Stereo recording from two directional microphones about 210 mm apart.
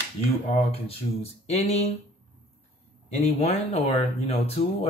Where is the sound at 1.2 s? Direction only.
30° left (ahead or behind).